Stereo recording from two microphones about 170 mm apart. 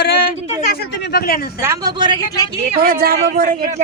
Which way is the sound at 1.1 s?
60° left (ahead or behind).